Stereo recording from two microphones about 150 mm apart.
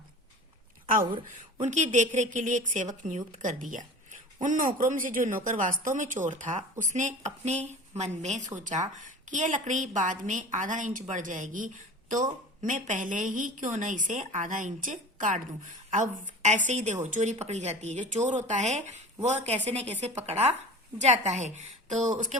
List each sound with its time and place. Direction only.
1.5 s a woman's voice: 50° right (ahead or behind)